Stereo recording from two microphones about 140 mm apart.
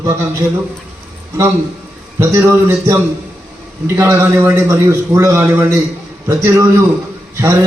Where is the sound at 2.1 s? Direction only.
20° right (ahead or behind).